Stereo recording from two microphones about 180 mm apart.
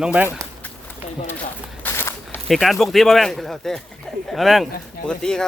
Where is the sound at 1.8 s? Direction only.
15° left (ahead or behind).